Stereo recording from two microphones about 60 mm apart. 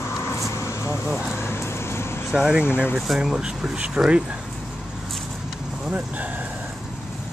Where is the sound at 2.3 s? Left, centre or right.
Centre.